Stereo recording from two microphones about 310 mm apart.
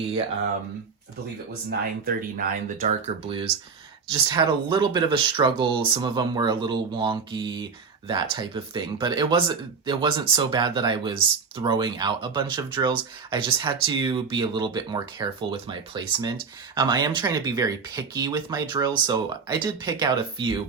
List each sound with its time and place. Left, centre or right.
2.8 s speech: centre